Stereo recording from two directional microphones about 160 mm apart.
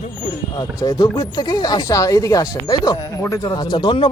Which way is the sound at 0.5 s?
25° left (ahead or behind).